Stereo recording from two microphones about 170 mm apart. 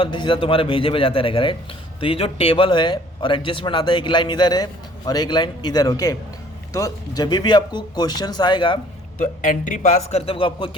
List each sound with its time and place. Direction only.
0.0 s a man's voice: 30° left (ahead or behind)
9.1 s a man's voice: 50° left (ahead or behind); by 10.7 s 30° left (ahead or behind)